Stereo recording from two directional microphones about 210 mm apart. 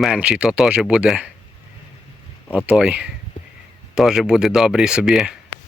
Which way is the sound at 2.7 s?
5° right (ahead or behind).